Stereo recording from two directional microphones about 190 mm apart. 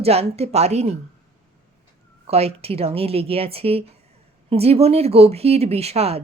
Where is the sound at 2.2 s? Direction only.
30° right (ahead or behind).